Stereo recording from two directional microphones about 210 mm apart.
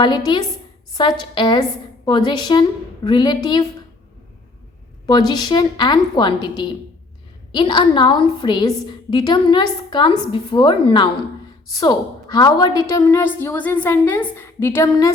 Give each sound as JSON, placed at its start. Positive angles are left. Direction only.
{"t": 0.0, "sound": "a woman's voice", "side_deg": 20}
{"t": 5.0, "sound": "a woman's voice", "side_deg": 20}